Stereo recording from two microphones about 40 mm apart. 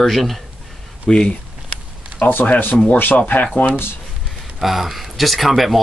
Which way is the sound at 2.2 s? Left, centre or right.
Left.